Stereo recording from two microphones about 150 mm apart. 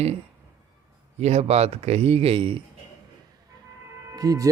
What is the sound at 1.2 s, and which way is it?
Speech, 45° right (ahead or behind).